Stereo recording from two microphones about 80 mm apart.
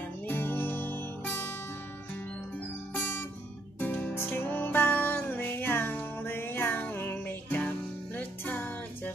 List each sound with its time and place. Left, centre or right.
0.3 s music: left
2.9 s guitar: left
3.8 s music: left